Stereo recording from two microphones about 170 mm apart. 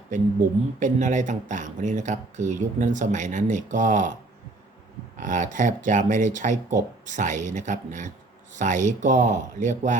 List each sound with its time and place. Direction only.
0.8 s speech: 45° right (ahead or behind)
5.2 s speech: 50° right (ahead or behind)